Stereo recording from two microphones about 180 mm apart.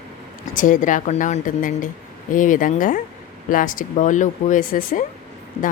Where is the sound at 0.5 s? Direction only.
45° left (ahead or behind).